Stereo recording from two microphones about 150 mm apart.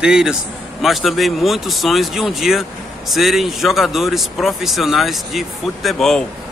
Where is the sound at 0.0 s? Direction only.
5° right (ahead or behind).